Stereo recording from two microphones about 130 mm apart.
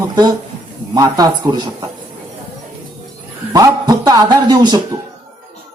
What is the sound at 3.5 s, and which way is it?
Speech, 30° right (ahead or behind).